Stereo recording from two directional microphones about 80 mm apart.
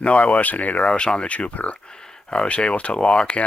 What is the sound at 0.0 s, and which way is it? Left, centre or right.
Speech, centre.